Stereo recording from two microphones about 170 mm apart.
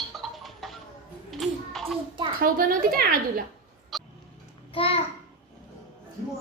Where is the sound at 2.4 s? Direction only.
55° right (ahead or behind).